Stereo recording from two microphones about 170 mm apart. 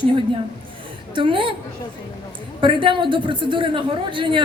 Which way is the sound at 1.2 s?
30° right (ahead or behind).